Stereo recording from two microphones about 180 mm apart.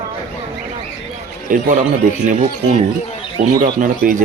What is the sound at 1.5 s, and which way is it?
Speech, 45° right (ahead or behind).